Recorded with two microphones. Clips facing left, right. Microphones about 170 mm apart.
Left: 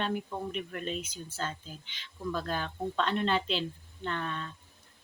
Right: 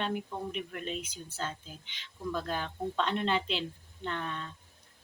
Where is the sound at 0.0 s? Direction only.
10° right (ahead or behind).